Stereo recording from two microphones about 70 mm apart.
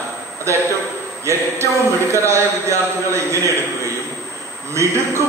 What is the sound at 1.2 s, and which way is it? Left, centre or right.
A man's voice, right.